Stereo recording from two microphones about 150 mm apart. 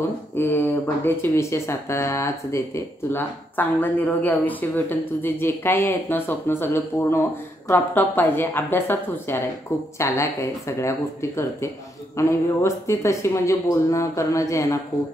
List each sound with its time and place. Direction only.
0.4 s speech: 15° left (ahead or behind)